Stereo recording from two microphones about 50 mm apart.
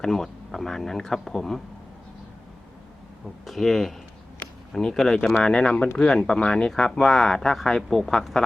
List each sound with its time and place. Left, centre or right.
0.0 s speech: centre
3.4 s speech: centre